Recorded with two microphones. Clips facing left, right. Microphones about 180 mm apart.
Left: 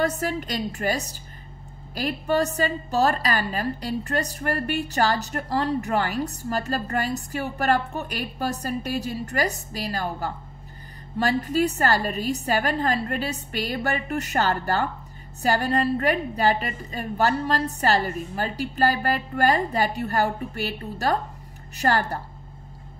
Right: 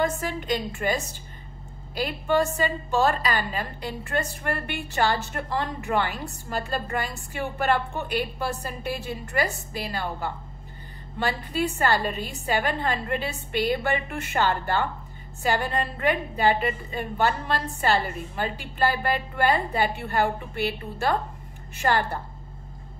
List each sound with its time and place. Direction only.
0.0 s a woman's voice: 40° left (ahead or behind)
2.2 s a woman's voice: 40° left (ahead or behind)
21.7 s a woman's voice: 40° left (ahead or behind)